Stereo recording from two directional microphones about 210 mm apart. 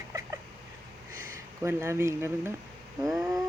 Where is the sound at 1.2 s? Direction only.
10° right (ahead or behind).